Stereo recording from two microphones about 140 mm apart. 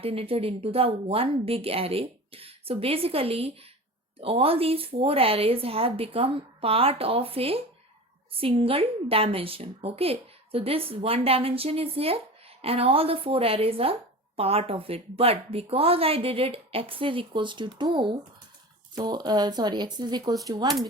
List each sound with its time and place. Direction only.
0.0 s a woman's voice: 45° right (ahead or behind); by 20.7 s 30° right (ahead or behind)